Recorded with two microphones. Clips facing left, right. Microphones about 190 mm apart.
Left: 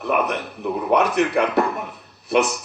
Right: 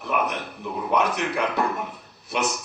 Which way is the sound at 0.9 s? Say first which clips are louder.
Left 5 dB; 65° left (ahead or behind).